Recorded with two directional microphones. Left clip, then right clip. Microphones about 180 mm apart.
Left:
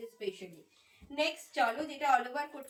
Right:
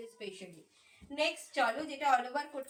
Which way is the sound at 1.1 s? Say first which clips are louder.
Even; 15° right (ahead or behind).